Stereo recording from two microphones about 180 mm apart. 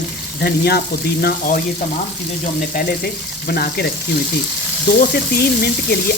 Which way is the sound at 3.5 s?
55° left (ahead or behind).